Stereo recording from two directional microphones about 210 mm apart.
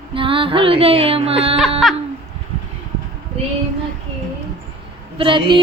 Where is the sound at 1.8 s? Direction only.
Centre (ahead or behind).